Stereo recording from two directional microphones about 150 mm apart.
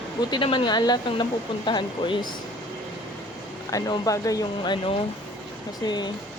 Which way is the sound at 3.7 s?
25° left (ahead or behind).